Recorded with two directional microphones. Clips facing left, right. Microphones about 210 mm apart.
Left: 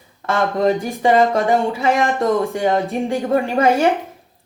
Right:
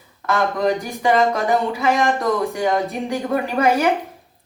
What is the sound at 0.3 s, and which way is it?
Speech, 30° left (ahead or behind).